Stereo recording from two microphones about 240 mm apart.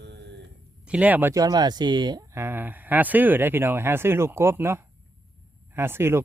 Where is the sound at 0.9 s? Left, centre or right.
Centre.